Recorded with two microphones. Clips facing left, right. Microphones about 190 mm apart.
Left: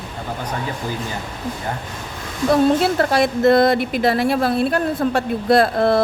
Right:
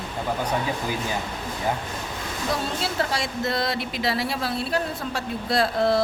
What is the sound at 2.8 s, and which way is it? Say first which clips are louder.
A woman's voice: left 10 dB; 55° left (ahead or behind).